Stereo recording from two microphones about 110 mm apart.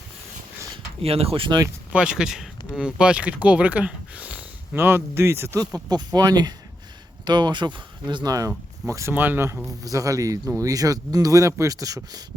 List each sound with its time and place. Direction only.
1.0 s speech: 65° right (ahead or behind)
1.5 s speech: 35° right (ahead or behind)
1.9 s speech: 10° right (ahead or behind); by 5.6 s 25° right (ahead or behind)
6.1 s speech: 35° right (ahead or behind)